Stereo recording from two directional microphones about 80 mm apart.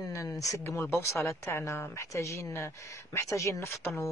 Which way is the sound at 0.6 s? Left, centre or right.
Left.